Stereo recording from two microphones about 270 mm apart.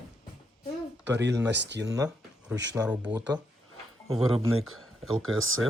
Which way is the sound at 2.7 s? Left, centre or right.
Centre.